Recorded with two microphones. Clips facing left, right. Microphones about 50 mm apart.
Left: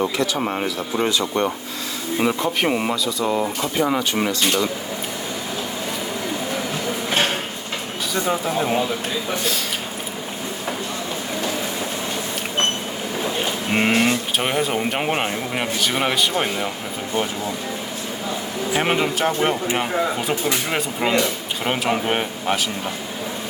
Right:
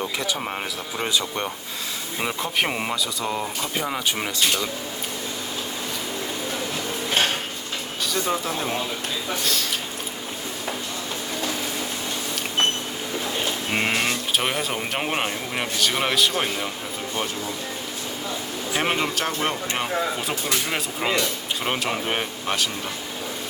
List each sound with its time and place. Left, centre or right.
0.6 s speech: centre
2.1 s speech: centre
8.1 s speech: centre
9.4 s speech: centre
13.7 s a sound: centre
14.0 s speech: centre
18.7 s speech: centre